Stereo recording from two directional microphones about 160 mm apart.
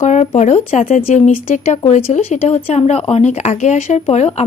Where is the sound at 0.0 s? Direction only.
45° left (ahead or behind).